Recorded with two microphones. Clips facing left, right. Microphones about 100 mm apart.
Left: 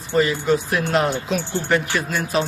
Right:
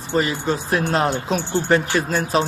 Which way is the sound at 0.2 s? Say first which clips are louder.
Left 3 dB; 35° right (ahead or behind).